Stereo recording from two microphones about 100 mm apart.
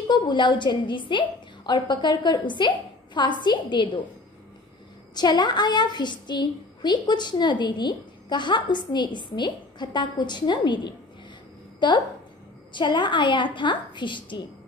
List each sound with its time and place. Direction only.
0.1 s a woman's voice: 50° left (ahead or behind)
5.1 s a woman's voice: 45° left (ahead or behind)